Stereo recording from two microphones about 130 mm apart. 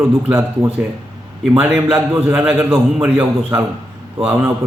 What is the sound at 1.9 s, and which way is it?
A man's voice, 10° right (ahead or behind).